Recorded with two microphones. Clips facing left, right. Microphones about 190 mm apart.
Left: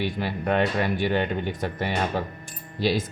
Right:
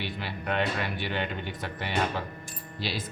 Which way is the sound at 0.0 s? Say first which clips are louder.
Left 8 dB; 45° left (ahead or behind).